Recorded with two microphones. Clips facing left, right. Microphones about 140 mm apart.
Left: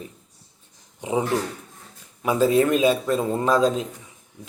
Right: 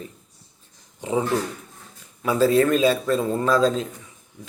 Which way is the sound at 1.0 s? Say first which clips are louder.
Even; 15° left (ahead or behind).